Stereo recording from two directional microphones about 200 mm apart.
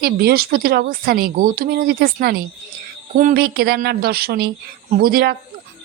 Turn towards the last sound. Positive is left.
turn(degrees=-50)  # may be behind; listen again after turning